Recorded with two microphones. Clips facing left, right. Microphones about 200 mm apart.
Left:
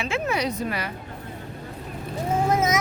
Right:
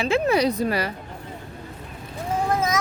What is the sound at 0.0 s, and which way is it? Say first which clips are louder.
Speech: right 6 dB; 35° right (ahead or behind).